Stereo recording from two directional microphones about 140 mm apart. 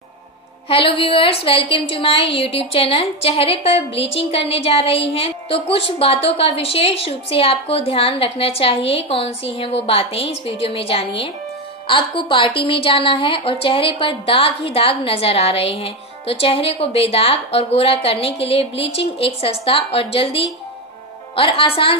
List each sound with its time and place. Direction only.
0.7 s a woman's voice: 40° left (ahead or behind)